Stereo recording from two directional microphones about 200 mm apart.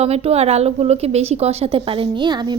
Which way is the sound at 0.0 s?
30° right (ahead or behind).